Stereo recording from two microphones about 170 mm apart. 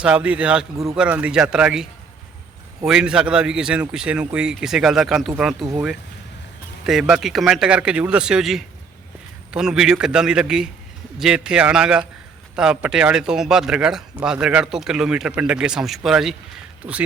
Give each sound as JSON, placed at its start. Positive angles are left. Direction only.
{"t": 0.0, "sound": "a man's voice", "side_deg": -5}
{"t": 6.8, "sound": "speech", "side_deg": 0}
{"t": 16.8, "sound": "a man's voice", "side_deg": -15}